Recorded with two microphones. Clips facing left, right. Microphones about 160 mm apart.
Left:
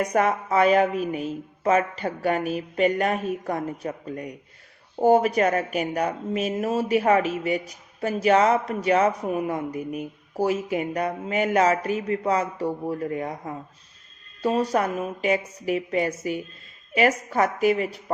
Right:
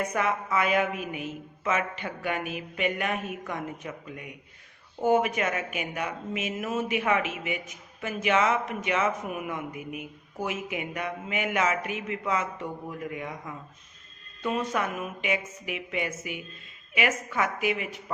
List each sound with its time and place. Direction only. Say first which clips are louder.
0.0 s speech: left 6 dB; 40° left (ahead or behind)